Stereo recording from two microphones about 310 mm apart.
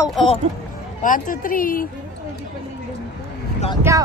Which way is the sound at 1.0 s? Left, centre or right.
Left.